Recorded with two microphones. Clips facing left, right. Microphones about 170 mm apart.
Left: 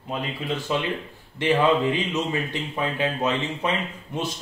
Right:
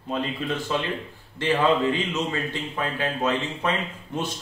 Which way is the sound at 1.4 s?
15° left (ahead or behind).